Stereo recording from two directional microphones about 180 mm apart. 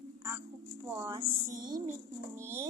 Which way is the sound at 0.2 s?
10° right (ahead or behind).